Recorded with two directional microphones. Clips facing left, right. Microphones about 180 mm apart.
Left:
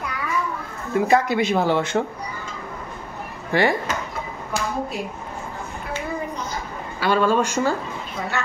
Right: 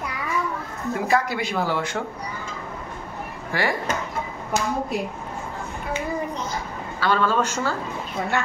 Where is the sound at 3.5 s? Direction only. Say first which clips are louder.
Left 6 dB; 25° left (ahead or behind).